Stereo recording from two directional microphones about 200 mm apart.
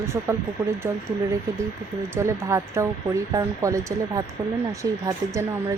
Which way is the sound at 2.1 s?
15° right (ahead or behind).